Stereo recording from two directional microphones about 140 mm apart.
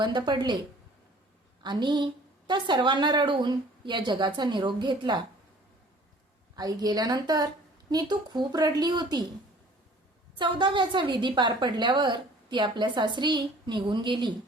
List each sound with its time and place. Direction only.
0.0 s a woman's voice: 35° right (ahead or behind)
1.6 s a woman's voice: 35° right (ahead or behind)
6.6 s a woman's voice: 30° right (ahead or behind)
10.3 s a woman's voice: 35° right (ahead or behind)